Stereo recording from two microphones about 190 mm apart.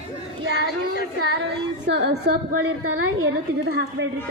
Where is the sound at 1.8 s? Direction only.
60° right (ahead or behind); by 3.1 s 90° right.